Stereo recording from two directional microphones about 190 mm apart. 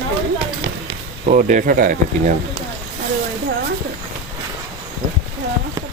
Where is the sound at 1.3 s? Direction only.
40° right (ahead or behind).